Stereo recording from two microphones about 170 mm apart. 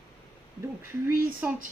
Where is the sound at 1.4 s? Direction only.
10° right (ahead or behind).